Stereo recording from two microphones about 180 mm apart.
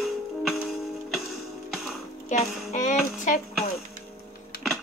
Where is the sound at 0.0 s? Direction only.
Centre (ahead or behind).